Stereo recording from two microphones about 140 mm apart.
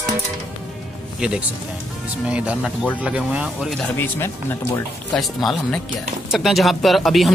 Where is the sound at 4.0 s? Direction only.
15° left (ahead or behind).